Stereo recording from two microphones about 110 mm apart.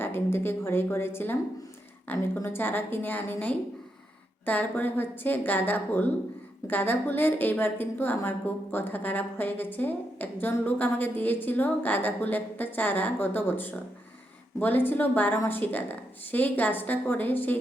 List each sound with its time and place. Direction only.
0.0 s a woman's voice: 20° left (ahead or behind)